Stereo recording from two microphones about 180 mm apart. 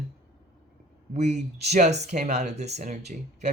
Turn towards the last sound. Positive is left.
turn(degrees=-40)  # may be behind; listen again after turning